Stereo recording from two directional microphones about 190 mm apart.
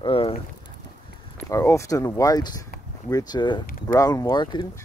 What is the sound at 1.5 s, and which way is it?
Speech, 15° left (ahead or behind).